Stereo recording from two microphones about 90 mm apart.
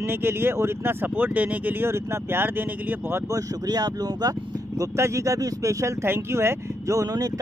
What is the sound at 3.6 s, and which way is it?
Speech, 45° right (ahead or behind).